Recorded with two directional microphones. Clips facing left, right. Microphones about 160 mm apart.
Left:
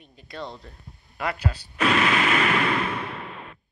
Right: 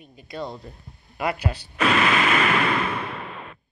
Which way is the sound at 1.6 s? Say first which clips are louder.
Even; 90° right.